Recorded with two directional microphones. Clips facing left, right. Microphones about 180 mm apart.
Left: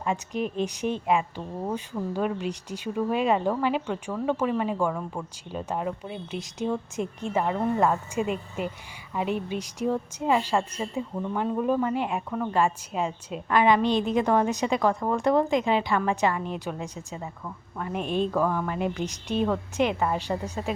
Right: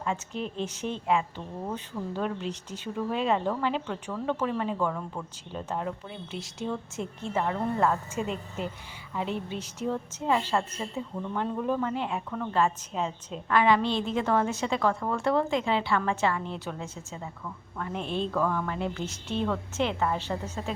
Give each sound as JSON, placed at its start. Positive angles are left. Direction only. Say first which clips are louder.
{"t": 0.0, "sound": "a woman's voice", "louder": "left 4 dB", "side_deg": 15}